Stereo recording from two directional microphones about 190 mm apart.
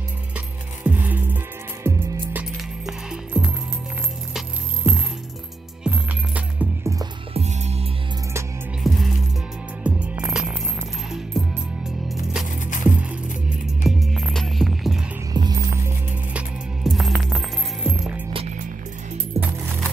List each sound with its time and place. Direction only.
0.8 s music: 10° right (ahead or behind)
7.3 s music: 35° right (ahead or behind)
8.8 s music: centre (ahead or behind)
12.4 s music: 45° left (ahead or behind)
13.1 s music: 5° right (ahead or behind)
15.3 s music: 20° right (ahead or behind)
16.3 s music: centre (ahead or behind)